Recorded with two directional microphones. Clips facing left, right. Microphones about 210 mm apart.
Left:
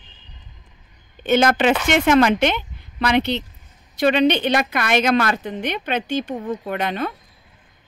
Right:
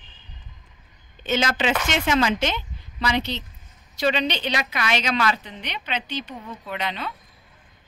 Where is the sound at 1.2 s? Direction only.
55° left (ahead or behind).